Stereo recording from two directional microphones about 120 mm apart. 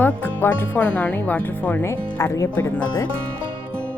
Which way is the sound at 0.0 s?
15° left (ahead or behind).